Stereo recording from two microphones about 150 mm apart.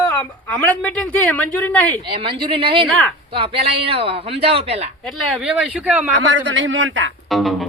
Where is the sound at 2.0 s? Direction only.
35° right (ahead or behind).